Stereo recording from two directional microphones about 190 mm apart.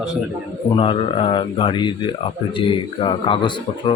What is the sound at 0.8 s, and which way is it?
Speech, 30° left (ahead or behind).